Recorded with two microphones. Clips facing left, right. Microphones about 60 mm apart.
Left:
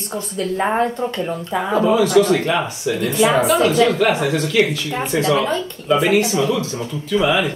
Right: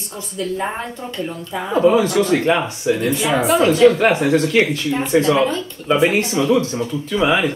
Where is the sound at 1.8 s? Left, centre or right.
Right.